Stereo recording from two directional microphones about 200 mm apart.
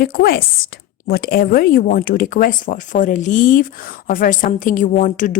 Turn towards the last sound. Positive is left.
turn(degrees=40)  # may be behind; listen again after turning